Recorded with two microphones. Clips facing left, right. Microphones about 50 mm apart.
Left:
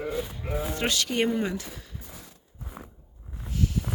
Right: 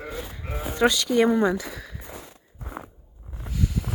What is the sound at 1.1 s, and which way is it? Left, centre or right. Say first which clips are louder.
Speech: right 6 dB; right.